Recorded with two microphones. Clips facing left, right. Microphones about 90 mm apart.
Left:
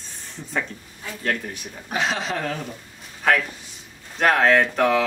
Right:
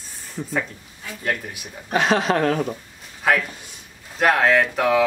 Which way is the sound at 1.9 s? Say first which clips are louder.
Right 6 dB; 55° right (ahead or behind).